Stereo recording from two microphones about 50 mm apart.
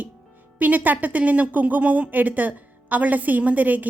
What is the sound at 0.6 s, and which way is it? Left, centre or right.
A woman's voice, right.